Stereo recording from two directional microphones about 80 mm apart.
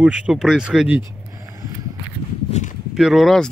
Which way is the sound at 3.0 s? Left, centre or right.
Centre.